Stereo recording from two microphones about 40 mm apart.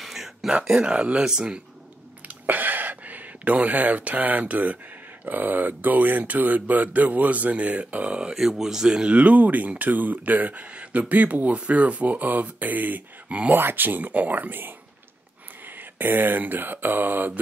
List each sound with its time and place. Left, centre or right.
0.0 s a sound: centre
0.8 s speech: right
2.2 s a sound: right
5.2 s speech: right
8.4 s speech: centre
9.1 s speech: right
13.5 s speech: right
15.6 s mantra: right